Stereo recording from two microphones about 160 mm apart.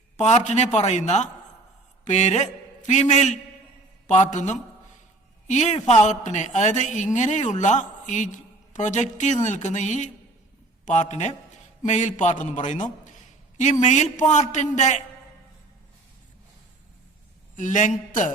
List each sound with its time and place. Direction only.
0.2 s a man's voice: 45° left (ahead or behind)
17.6 s a man's voice: 50° left (ahead or behind)